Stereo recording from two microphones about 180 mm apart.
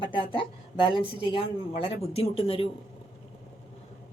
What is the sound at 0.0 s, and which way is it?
A woman's voice, 30° left (ahead or behind).